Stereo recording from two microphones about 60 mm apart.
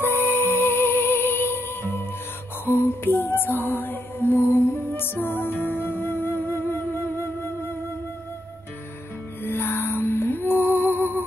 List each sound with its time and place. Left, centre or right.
0.0 s music: left
9.4 s music: left